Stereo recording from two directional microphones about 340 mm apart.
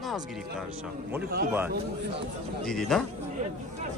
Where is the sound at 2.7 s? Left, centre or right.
Centre.